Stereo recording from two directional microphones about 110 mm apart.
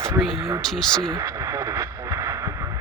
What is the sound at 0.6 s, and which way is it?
Speech, 5° left (ahead or behind).